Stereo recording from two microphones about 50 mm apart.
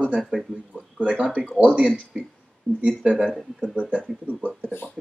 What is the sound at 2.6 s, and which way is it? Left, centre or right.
Speech, left.